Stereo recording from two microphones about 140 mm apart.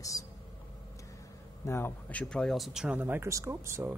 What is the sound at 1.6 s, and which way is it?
Speech, 15° left (ahead or behind).